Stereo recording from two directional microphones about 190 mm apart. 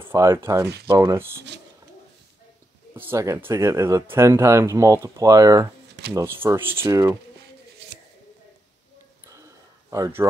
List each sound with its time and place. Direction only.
0.0 s speech: 15° right (ahead or behind)
2.9 s speech: 15° right (ahead or behind)
9.3 s a sound: 15° right (ahead or behind)